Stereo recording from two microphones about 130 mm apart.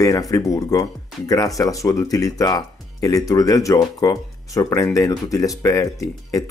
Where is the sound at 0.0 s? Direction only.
25° left (ahead or behind).